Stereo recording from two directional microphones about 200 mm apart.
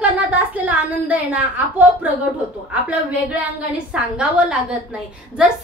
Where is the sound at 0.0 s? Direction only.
5° right (ahead or behind).